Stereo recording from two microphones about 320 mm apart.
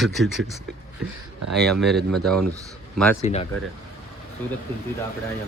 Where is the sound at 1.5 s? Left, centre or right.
Centre.